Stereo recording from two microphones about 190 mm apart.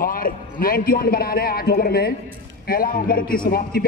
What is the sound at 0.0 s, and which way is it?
A man's voice, 50° left (ahead or behind).